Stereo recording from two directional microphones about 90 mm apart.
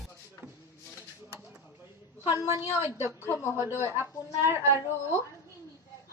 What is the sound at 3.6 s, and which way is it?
Speech, 25° right (ahead or behind).